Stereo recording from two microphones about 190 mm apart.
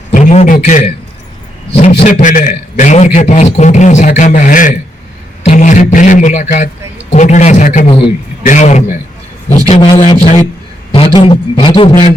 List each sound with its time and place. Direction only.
0.1 s a man's voice: 40° left (ahead or behind)
2.0 s a man's voice: 40° left (ahead or behind)